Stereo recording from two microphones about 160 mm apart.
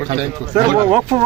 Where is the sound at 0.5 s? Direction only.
30° right (ahead or behind).